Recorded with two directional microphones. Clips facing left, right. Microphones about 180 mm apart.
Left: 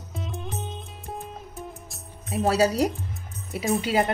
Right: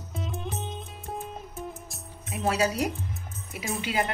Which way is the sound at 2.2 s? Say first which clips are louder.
Left 5 dB; 35° left (ahead or behind).